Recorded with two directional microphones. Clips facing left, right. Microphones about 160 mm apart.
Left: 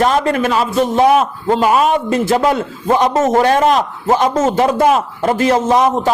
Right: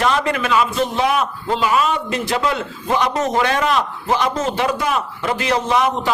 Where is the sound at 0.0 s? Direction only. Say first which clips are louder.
Left 5 dB; 40° left (ahead or behind).